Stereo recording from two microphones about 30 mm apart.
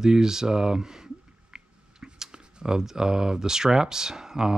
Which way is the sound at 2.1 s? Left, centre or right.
Right.